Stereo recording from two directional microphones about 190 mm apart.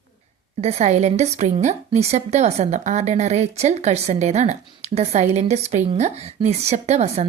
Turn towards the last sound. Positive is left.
turn(degrees=-35)  # may be behind; listen again after turning